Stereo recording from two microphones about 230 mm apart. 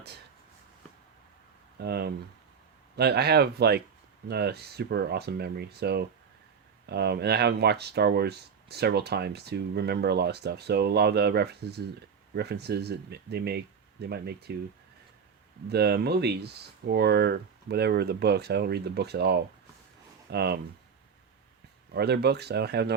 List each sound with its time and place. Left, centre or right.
1.8 s speech: right
15.7 s speech: right
21.9 s speech: right